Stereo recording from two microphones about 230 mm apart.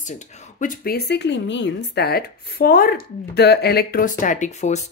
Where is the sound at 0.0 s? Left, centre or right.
Left.